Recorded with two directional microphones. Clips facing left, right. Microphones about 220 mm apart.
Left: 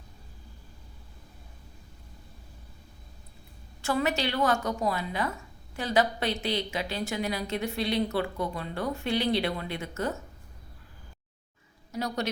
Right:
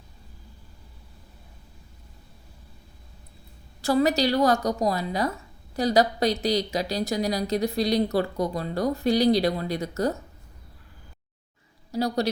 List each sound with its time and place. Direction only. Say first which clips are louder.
3.8 s a woman's voice: right 6 dB; 35° right (ahead or behind)
11.9 s speech: right 6 dB; 35° right (ahead or behind)